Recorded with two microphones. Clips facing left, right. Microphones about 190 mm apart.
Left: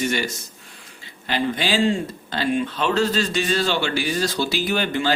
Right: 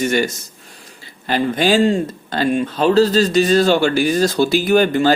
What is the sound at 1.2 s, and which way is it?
Speech, 45° right (ahead or behind).